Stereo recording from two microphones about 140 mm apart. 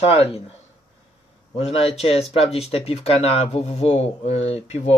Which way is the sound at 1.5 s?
45° left (ahead or behind).